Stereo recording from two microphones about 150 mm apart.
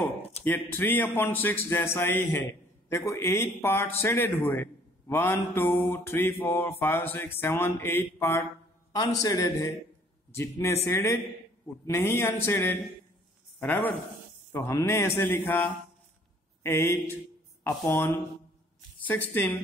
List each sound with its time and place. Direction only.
0.4 s a man's voice: 15° left (ahead or behind)